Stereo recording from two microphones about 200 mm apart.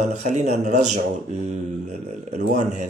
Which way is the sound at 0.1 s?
35° right (ahead or behind).